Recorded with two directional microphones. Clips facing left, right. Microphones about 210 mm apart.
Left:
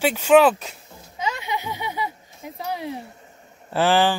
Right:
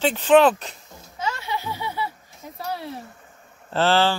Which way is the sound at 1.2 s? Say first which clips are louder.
Left 1 dB; 15° left (ahead or behind).